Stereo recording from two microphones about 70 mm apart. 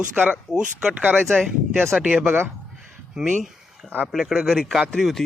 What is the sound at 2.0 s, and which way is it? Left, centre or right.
A man's voice, centre.